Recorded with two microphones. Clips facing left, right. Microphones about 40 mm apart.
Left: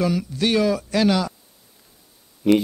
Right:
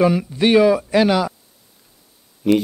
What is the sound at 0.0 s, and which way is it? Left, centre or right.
Speech, right.